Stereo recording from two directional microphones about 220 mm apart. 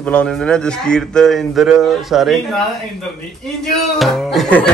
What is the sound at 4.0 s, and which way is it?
Speech, centre (ahead or behind).